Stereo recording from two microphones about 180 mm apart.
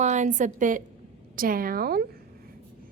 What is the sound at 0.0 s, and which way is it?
A woman's voice, 40° right (ahead or behind).